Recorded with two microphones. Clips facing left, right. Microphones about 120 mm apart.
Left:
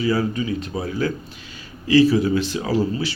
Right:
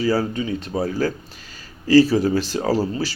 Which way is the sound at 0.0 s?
35° right (ahead or behind).